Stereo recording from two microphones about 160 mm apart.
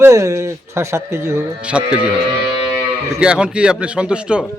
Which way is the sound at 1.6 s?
5° right (ahead or behind).